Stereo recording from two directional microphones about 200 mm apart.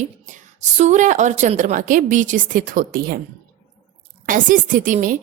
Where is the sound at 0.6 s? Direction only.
35° right (ahead or behind).